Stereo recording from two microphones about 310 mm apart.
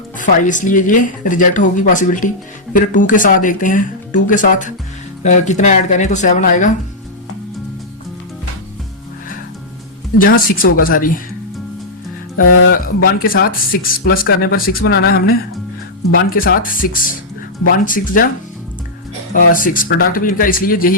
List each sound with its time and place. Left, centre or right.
0.2 s speech: left
10.2 s speech: left
12.4 s speech: left
12.7 s speech: left
19.3 s speech: left